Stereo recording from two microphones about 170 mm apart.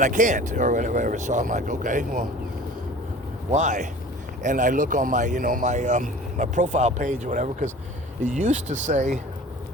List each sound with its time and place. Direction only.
0.0 s speech: 50° right (ahead or behind)
3.5 s speech: 45° right (ahead or behind)